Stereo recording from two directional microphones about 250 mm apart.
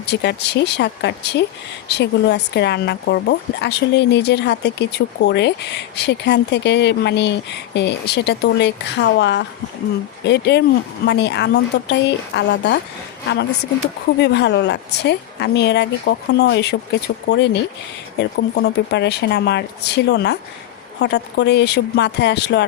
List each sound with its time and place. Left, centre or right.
0.0 s speech: left
14.2 s speech: left